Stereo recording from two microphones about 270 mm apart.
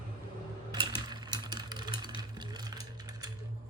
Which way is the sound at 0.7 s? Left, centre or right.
Centre.